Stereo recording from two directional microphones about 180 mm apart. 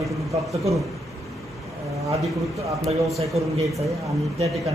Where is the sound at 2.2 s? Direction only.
Centre (ahead or behind).